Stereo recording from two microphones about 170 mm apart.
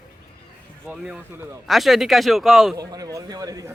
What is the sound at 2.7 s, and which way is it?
A man's voice, 20° right (ahead or behind).